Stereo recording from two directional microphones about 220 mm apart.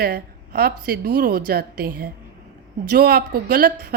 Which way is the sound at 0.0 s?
45° right (ahead or behind).